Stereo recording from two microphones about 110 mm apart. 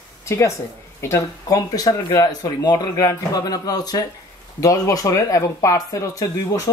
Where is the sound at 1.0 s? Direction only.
30° left (ahead or behind).